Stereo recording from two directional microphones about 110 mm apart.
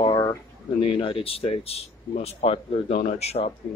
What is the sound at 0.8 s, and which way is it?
Speech, 55° left (ahead or behind).